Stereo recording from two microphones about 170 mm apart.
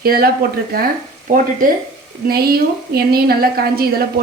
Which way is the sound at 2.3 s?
65° right (ahead or behind).